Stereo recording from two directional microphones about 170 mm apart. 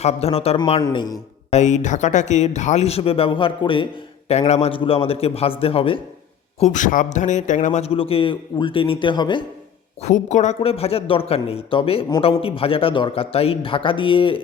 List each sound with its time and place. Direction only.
0.0 s a man's voice: 35° left (ahead or behind)
1.5 s a man's voice: 40° left (ahead or behind)
6.6 s a man's voice: 50° left (ahead or behind); by 9.4 s 25° left (ahead or behind)
10.0 s a man's voice: 45° left (ahead or behind)